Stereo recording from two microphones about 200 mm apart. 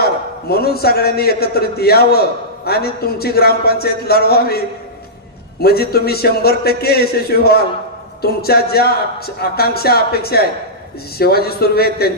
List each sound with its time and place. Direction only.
0.0 s a man's voice: 50° left (ahead or behind)